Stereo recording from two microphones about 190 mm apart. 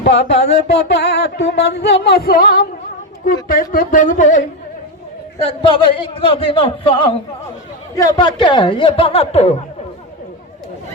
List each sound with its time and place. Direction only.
0.0 s speech: 65° left (ahead or behind)
0.8 s music: 65° left (ahead or behind)
3.5 s speech: 45° left (ahead or behind)
5.5 s a man's voice: 25° left (ahead or behind)